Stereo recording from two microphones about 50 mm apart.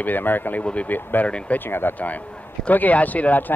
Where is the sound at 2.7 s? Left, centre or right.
Left.